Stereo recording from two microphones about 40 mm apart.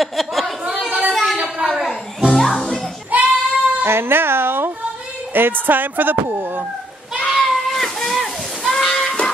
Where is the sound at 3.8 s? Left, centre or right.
Right.